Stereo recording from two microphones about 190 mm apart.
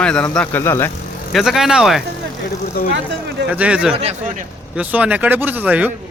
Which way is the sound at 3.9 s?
35° right (ahead or behind).